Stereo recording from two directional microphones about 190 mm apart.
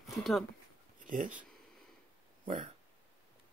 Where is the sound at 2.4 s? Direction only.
40° right (ahead or behind).